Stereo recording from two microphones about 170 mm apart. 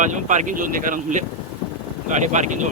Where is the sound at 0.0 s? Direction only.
45° right (ahead or behind).